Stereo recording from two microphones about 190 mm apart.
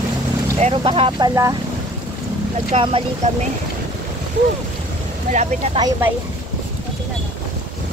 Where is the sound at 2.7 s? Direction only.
30° right (ahead or behind).